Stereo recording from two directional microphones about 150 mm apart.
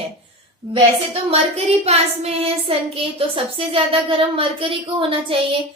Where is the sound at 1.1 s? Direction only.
45° right (ahead or behind).